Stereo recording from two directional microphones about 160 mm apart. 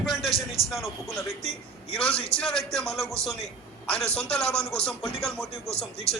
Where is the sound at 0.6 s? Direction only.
20° right (ahead or behind).